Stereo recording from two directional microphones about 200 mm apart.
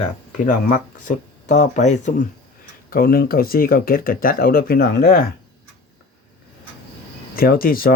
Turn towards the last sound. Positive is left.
turn(degrees=45)  # may be behind; listen again after turning